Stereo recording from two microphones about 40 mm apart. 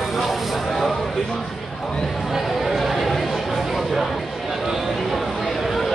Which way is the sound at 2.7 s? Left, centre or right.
Centre.